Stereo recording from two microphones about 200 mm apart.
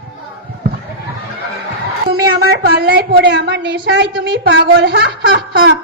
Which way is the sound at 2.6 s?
50° right (ahead or behind).